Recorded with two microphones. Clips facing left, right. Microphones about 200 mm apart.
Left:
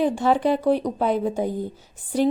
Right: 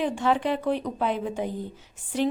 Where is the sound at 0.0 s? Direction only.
35° left (ahead or behind).